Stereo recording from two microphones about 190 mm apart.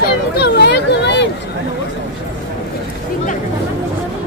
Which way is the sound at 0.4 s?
60° left (ahead or behind).